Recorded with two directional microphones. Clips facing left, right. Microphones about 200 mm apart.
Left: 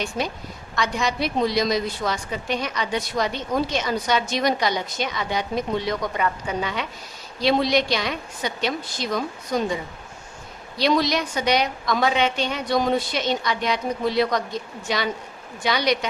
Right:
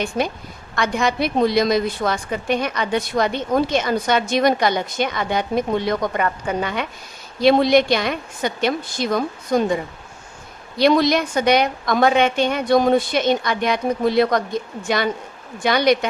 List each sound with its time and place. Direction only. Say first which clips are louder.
0.8 s a woman's voice: right 4 dB; 55° right (ahead or behind)
10.8 s a woman's voice: right 5 dB; 55° right (ahead or behind)